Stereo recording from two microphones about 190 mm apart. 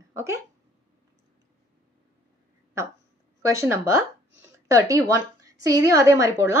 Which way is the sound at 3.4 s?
15° right (ahead or behind).